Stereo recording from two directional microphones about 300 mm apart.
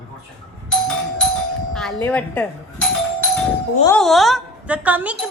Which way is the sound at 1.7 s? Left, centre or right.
Centre.